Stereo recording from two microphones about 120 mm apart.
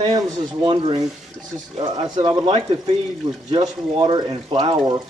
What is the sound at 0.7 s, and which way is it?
Speech, 50° right (ahead or behind).